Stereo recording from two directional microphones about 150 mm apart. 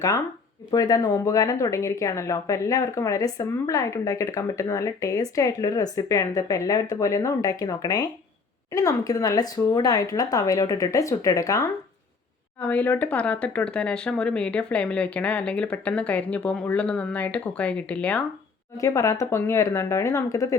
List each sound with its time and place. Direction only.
0.7 s a woman's voice: 25° left (ahead or behind)
12.6 s speech: 10° left (ahead or behind)
18.8 s a woman's voice: 20° left (ahead or behind)